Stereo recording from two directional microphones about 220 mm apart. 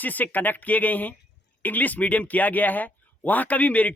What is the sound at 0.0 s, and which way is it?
A man's voice, 10° left (ahead or behind).